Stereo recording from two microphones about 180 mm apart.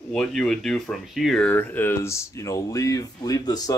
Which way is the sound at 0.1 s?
5° left (ahead or behind).